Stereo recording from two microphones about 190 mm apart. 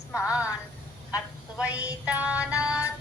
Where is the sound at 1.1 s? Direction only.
5° right (ahead or behind).